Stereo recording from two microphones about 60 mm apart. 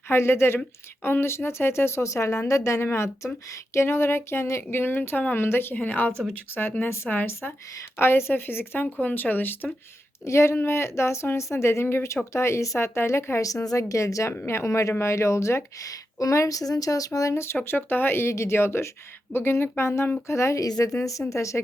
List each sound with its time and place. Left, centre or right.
0.1 s a woman's voice: left
2.8 s a woman's voice: left
9.0 s a woman's voice: left
10.2 s speech: left
13.4 s a woman's voice: left
14.3 s speech: left
15.9 s a woman's voice: left
17.1 s speech: left
17.6 s speech: left
20.6 s a woman's voice: left